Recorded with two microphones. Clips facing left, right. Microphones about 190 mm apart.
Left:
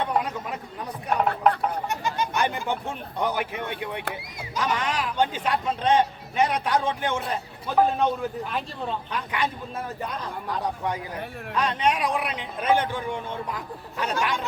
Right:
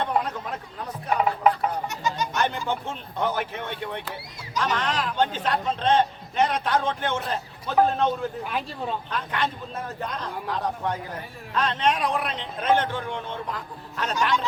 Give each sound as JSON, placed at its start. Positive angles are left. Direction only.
{"t": 1.5, "sound": "a sound", "side_deg": 0}
{"t": 1.9, "sound": "music", "side_deg": 55}
{"t": 2.3, "sound": "a man's voice", "side_deg": 10}
{"t": 8.4, "sound": "speech", "side_deg": -5}
{"t": 9.0, "sound": "a man's voice", "side_deg": 10}